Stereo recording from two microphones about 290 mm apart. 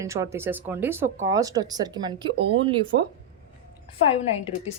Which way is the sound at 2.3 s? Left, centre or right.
Right.